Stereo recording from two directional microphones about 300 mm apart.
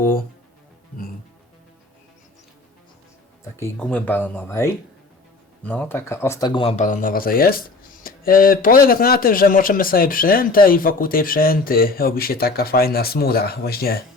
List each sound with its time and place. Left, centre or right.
3.6 s speech: centre; by 14.0 s left